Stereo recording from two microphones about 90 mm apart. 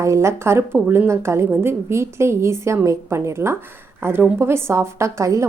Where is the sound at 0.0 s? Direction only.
35° right (ahead or behind).